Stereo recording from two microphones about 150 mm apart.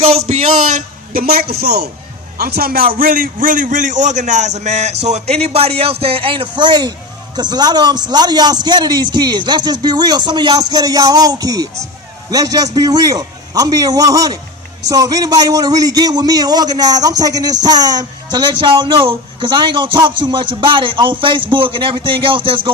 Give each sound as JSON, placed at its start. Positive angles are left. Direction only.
{"t": 0.0, "sound": "a man's voice", "side_deg": -45}